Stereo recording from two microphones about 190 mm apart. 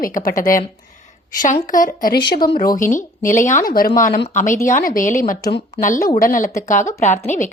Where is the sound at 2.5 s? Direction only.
45° left (ahead or behind).